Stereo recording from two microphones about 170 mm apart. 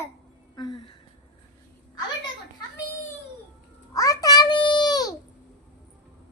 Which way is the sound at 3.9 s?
20° left (ahead or behind).